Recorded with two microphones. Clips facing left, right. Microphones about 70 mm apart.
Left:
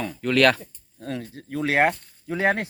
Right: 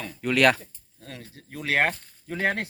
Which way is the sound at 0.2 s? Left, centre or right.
Centre.